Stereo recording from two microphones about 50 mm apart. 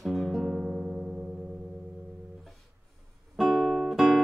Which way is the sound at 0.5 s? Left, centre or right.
Centre.